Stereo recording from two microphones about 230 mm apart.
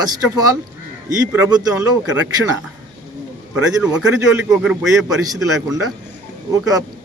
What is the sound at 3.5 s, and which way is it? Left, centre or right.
A man's voice, centre.